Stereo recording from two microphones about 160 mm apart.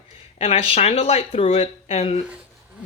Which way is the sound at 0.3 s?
35° left (ahead or behind).